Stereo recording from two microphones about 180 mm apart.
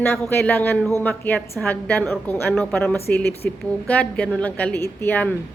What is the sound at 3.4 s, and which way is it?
Speech, 60° left (ahead or behind).